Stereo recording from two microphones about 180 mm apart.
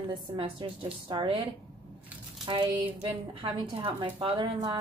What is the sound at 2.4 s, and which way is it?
A woman's voice, 25° right (ahead or behind).